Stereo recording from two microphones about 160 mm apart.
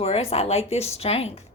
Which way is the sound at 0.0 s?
40° left (ahead or behind).